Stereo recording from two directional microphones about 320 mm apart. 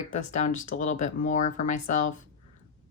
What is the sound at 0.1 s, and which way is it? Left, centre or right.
Speech, left.